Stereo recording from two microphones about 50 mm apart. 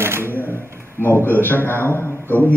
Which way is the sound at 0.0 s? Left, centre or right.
Right.